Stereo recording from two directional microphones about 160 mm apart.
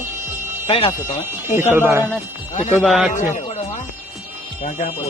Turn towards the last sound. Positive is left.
turn(degrees=0)  # may be behind; listen again after turning